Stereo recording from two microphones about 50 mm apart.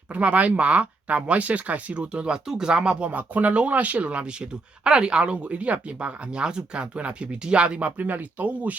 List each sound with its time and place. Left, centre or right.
0.1 s speech: right